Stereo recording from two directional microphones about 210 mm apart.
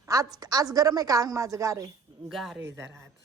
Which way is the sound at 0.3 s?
15° right (ahead or behind).